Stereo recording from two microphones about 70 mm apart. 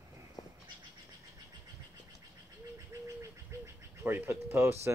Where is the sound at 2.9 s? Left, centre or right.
Right.